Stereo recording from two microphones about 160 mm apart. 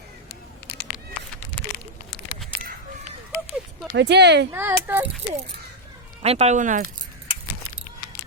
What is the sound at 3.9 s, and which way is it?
Speech, 90° right.